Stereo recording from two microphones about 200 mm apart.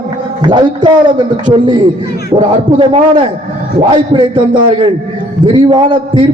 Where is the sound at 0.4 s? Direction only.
20° right (ahead or behind).